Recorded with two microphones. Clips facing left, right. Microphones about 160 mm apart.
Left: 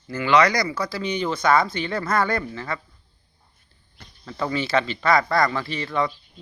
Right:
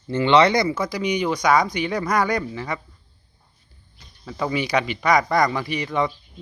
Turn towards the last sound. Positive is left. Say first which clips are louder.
# right 2 dB
turn(degrees=-15)  # may be behind; listen again after turning